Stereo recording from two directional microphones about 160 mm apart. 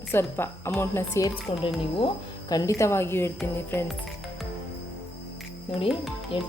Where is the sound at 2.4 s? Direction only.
20° left (ahead or behind).